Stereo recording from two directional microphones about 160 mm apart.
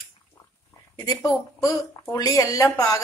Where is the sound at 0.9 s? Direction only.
25° left (ahead or behind).